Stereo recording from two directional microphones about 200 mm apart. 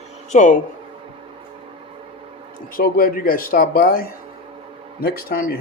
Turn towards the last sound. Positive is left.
turn(degrees=45)  # may be behind; listen again after turning